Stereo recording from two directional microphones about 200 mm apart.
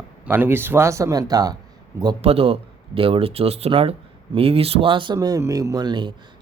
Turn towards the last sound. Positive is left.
turn(degrees=-20)  # may be behind; listen again after turning